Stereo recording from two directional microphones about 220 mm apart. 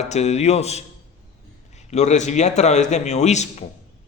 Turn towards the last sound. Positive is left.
turn(degrees=30)  # may be behind; listen again after turning